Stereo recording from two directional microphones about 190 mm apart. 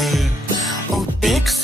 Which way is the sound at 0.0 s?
Centre (ahead or behind).